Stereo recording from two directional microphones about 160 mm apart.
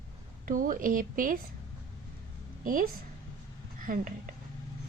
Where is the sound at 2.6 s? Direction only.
60° right (ahead or behind).